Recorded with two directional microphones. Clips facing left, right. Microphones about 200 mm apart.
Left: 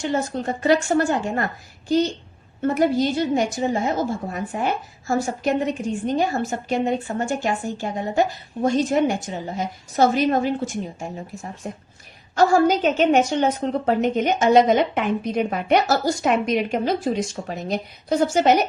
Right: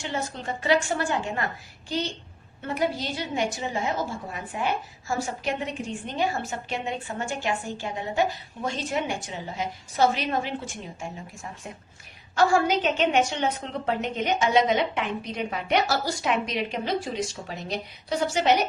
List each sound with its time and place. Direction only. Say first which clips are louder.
0.0 s a woman's voice: left 8 dB; 45° left (ahead or behind)